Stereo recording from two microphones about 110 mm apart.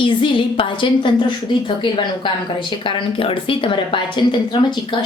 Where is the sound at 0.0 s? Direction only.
50° left (ahead or behind).